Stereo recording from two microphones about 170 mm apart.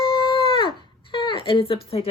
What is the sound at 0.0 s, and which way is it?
A woman's voice, 25° left (ahead or behind).